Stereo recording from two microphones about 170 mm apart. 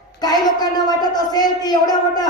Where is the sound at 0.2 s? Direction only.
25° left (ahead or behind).